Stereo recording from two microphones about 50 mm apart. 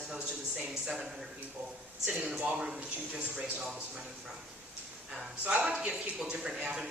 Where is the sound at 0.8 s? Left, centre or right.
Centre.